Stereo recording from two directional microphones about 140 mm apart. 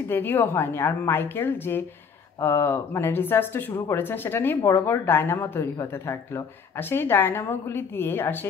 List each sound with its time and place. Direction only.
0.1 s speech: 15° left (ahead or behind)